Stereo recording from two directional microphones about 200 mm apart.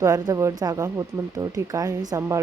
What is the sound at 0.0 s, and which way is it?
Speech, 15° right (ahead or behind).